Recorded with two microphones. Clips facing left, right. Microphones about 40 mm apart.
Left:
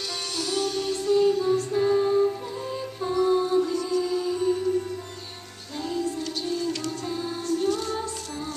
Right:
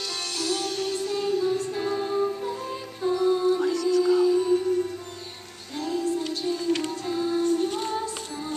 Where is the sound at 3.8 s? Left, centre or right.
Left.